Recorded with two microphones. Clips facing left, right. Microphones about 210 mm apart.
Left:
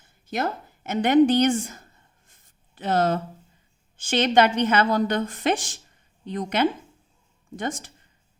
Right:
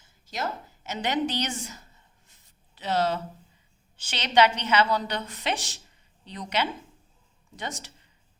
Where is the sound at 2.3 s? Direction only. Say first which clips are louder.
Left 1 dB; 50° left (ahead or behind).